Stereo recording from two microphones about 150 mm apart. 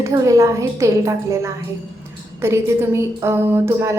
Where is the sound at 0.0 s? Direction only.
20° right (ahead or behind).